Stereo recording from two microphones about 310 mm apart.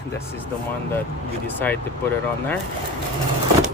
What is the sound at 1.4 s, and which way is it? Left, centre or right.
Speech, centre.